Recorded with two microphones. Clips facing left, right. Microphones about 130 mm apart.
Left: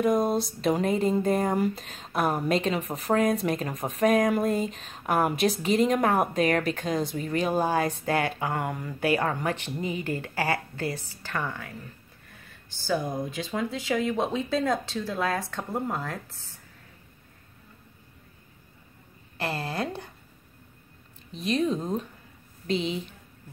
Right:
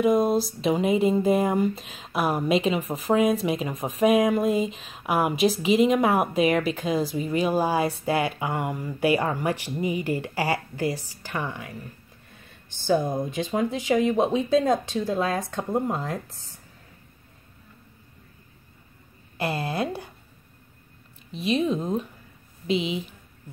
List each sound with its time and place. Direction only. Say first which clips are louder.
0.0 s speech: right 3 dB; centre (ahead or behind)
9.0 s speech: right 3 dB; 15° right (ahead or behind)
19.3 s speech: right 3 dB; 15° right (ahead or behind)
21.3 s speech: right 2 dB; 5° right (ahead or behind)